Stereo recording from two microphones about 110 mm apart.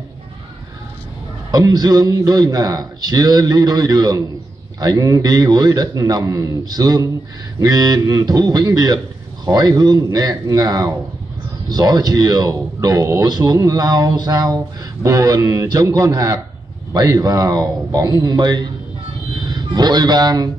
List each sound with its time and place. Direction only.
1.5 s a man's voice: 35° right (ahead or behind)